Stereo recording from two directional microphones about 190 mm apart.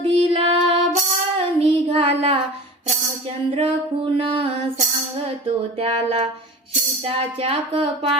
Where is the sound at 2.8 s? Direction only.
30° right (ahead or behind).